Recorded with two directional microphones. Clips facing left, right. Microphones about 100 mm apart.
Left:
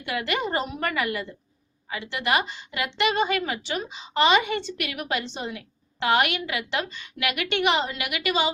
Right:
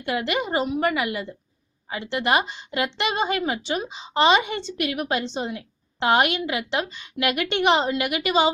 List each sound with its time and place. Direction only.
0.0 s a woman's voice: 25° right (ahead or behind)
0.3 s a woman's voice: 10° right (ahead or behind)
1.9 s a woman's voice: 30° right (ahead or behind)